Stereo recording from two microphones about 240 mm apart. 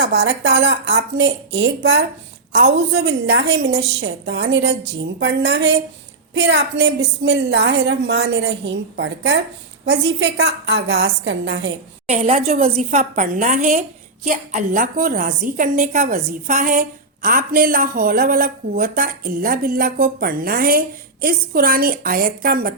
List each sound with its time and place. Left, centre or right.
0.0 s a woman's voice: right
12.0 s a woman's voice: right